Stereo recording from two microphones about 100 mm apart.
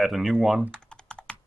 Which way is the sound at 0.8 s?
10° left (ahead or behind).